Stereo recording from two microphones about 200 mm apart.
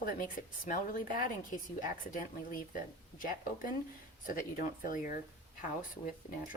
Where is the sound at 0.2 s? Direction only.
45° left (ahead or behind).